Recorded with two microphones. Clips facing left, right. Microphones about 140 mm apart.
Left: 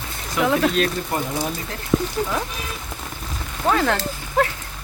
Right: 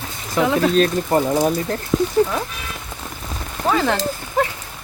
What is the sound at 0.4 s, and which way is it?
Speech, 35° right (ahead or behind).